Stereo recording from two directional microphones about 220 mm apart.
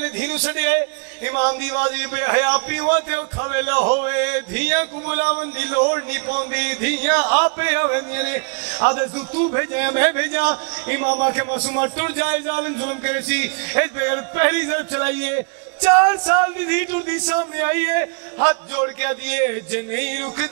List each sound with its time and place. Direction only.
0.0 s a man's voice: 10° right (ahead or behind)
6.5 s speech: 10° right (ahead or behind)
8.7 s a man's voice: 25° right (ahead or behind)